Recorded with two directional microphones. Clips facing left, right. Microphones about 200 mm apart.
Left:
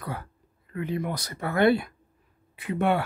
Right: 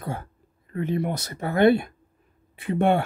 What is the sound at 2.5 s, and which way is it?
Speech, 25° right (ahead or behind).